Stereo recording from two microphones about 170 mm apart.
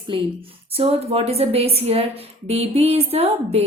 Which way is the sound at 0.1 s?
30° right (ahead or behind).